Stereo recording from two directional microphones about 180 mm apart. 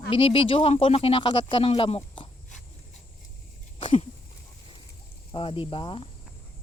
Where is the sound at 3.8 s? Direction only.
30° left (ahead or behind).